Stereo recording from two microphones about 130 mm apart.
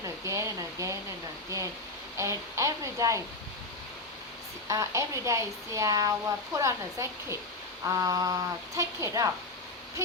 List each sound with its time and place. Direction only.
0.0 s a child's voice: 25° right (ahead or behind)
4.7 s a child's voice: 25° right (ahead or behind)